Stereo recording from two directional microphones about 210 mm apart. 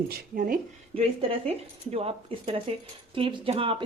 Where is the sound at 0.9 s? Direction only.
30° right (ahead or behind).